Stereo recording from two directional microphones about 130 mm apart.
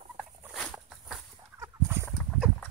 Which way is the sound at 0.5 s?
Centre (ahead or behind).